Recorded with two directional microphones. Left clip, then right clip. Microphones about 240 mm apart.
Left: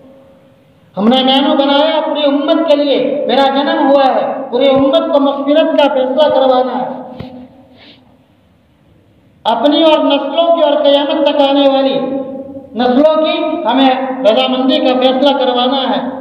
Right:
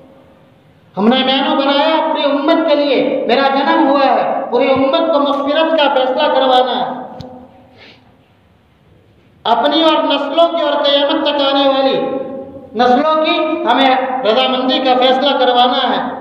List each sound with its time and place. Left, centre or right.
0.9 s a woman's voice: right
6.1 s a woman's voice: right
9.4 s a woman's voice: right